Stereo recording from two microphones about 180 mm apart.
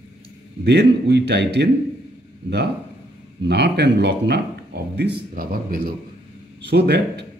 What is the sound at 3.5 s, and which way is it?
A man's voice, 70° right (ahead or behind).